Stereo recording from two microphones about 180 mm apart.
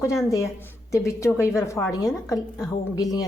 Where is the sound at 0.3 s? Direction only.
15° left (ahead or behind).